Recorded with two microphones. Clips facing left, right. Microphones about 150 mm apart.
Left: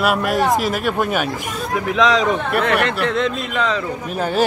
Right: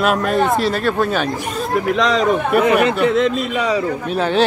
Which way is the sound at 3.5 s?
10° right (ahead or behind).